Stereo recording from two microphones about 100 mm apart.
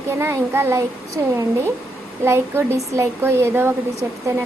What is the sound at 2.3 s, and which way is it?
A woman's voice, 25° right (ahead or behind).